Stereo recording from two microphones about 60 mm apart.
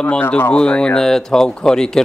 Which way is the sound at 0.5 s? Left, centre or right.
Centre.